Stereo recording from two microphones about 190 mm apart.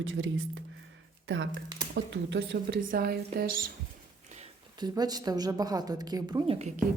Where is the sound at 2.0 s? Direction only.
70° right (ahead or behind).